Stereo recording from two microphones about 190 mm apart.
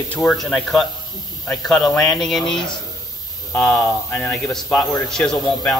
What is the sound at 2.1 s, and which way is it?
Speech, centre (ahead or behind).